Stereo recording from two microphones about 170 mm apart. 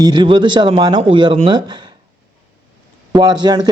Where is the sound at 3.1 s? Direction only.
25° right (ahead or behind).